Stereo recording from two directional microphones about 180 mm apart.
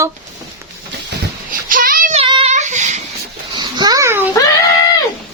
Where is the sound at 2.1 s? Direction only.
30° right (ahead or behind).